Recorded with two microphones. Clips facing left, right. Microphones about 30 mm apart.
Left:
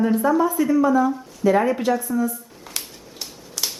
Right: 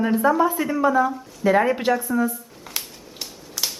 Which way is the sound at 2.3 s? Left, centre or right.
Centre.